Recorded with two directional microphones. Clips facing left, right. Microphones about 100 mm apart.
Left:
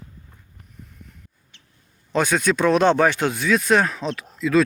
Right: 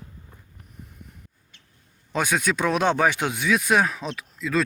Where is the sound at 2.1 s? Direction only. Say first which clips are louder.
Left 4 dB; 10° right (ahead or behind).